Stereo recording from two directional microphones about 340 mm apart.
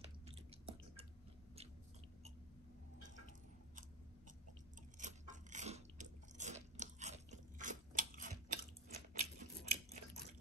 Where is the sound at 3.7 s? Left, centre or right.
Right.